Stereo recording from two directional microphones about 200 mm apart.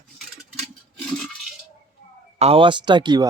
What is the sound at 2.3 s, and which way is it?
Speech, 30° right (ahead or behind).